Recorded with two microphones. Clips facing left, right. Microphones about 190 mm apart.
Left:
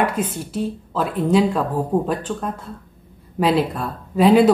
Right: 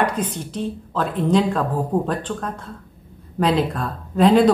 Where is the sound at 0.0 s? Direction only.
5° left (ahead or behind).